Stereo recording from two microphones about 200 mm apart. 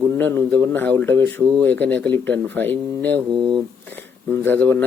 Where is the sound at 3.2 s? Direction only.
20° right (ahead or behind).